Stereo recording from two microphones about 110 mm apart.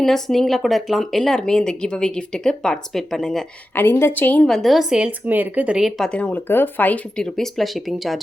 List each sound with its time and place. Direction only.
0.0 s speech: 5° left (ahead or behind)
3.8 s speech: 20° left (ahead or behind)
4.4 s a woman's voice: centre (ahead or behind)
6.1 s speech: 15° left (ahead or behind); by 8.2 s centre (ahead or behind)